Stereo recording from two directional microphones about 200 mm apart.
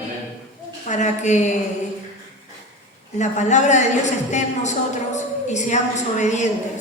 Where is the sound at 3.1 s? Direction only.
35° left (ahead or behind).